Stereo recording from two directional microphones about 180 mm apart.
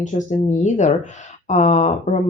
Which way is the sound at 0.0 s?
40° left (ahead or behind).